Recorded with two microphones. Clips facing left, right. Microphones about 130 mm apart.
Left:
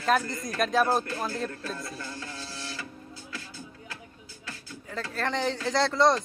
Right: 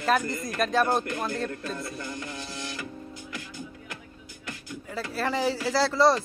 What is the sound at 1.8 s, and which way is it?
Music, 15° right (ahead or behind).